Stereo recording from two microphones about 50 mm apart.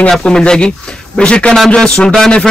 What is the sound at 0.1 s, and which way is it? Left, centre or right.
A man's voice, centre.